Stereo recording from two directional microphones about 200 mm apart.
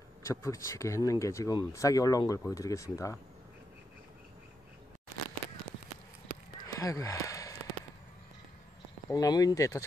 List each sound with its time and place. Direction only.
0.2 s speech: 15° left (ahead or behind)
6.7 s a sound: 15° left (ahead or behind)
9.1 s speech: 20° left (ahead or behind)